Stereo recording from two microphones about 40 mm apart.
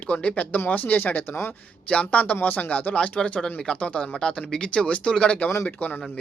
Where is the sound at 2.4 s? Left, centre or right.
Left.